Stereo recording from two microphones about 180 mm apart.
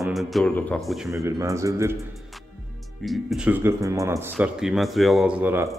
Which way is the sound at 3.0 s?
Centre (ahead or behind).